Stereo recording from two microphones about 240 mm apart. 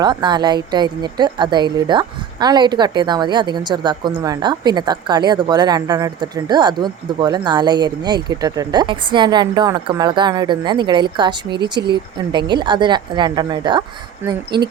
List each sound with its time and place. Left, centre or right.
0.0 s a woman's voice: centre